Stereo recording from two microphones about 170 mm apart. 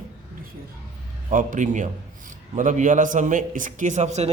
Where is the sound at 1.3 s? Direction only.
50° right (ahead or behind).